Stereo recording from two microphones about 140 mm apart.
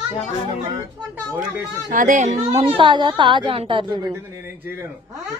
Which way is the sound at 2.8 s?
35° right (ahead or behind).